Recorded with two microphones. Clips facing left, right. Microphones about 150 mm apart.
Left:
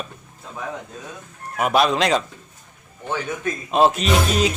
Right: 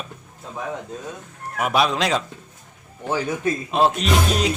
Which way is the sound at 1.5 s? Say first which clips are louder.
Left 2 dB; centre (ahead or behind).